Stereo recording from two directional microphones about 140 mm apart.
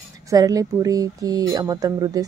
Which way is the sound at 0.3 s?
25° right (ahead or behind).